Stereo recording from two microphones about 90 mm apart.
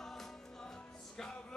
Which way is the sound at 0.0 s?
5° left (ahead or behind).